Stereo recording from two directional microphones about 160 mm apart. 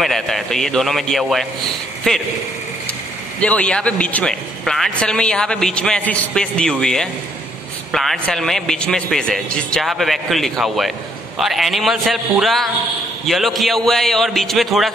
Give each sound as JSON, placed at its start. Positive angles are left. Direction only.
{"t": 0.0, "sound": "a man's voice", "side_deg": 0}
{"t": 3.3, "sound": "a man's voice", "side_deg": 10}